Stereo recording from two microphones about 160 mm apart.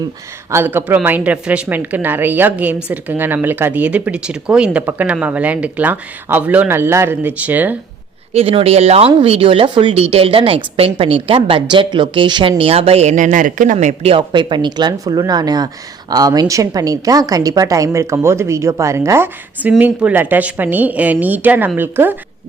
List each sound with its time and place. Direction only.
0.5 s a woman's voice: 15° right (ahead or behind)
8.3 s a woman's voice: 40° right (ahead or behind); by 22.2 s 10° right (ahead or behind)